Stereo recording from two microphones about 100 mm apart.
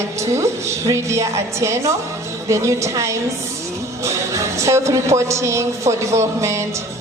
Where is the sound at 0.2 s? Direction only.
30° right (ahead or behind).